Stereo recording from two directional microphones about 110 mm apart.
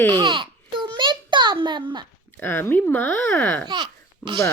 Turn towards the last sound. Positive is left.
turn(degrees=-45)  # may be behind; listen again after turning